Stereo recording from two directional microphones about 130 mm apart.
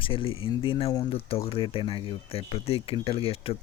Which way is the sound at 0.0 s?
45° left (ahead or behind).